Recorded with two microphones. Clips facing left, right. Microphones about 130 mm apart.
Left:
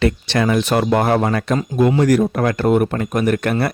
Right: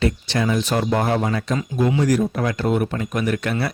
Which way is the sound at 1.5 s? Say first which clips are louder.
Left 5 dB; 45° left (ahead or behind).